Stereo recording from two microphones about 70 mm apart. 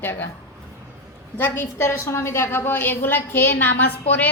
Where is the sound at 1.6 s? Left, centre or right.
Left.